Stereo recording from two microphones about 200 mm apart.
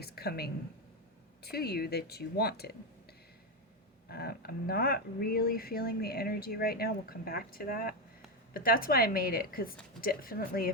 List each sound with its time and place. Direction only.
0.0 s a sound: 50° left (ahead or behind)
1.5 s speech: 50° left (ahead or behind)
4.1 s speech: 50° left (ahead or behind)